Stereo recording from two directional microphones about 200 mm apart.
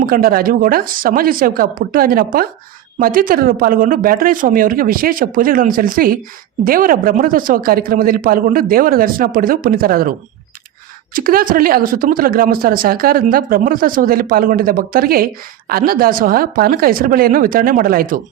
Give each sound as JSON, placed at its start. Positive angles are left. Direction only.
{"t": 0.0, "sound": "a woman's voice", "side_deg": -45}